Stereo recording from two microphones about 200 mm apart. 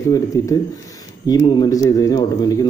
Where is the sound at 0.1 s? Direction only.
15° left (ahead or behind).